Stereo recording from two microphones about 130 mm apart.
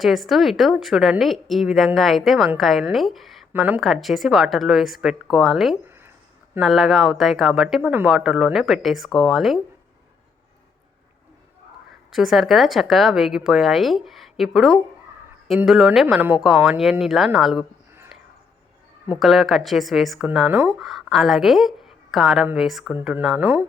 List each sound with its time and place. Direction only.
0.0 s speech: centre (ahead or behind)
3.5 s speech: 15° right (ahead or behind)
3.8 s speech: centre (ahead or behind)
7.8 s speech: 15° right (ahead or behind)
8.0 s speech: 5° right (ahead or behind)
12.1 s speech: centre (ahead or behind)
19.2 s speech: centre (ahead or behind)
20.5 s speech: 20° right (ahead or behind)
20.7 s a woman's voice: centre (ahead or behind)
23.4 s speech: 15° right (ahead or behind)